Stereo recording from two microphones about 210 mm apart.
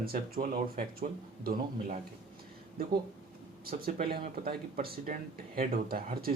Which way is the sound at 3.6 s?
45° right (ahead or behind).